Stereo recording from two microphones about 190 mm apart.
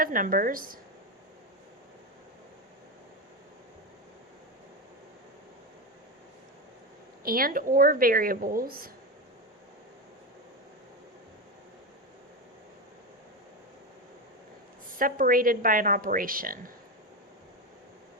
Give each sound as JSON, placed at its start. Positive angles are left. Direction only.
{"t": 0.0, "sound": "a woman's voice", "side_deg": -45}
{"t": 7.3, "sound": "a woman's voice", "side_deg": -50}
{"t": 14.9, "sound": "a woman's voice", "side_deg": -45}